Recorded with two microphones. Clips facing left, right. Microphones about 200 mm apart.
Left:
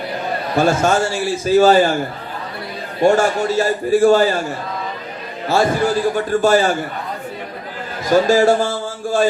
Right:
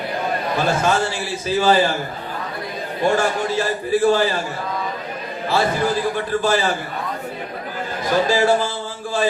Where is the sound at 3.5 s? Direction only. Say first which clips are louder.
Left 4 dB; 45° left (ahead or behind).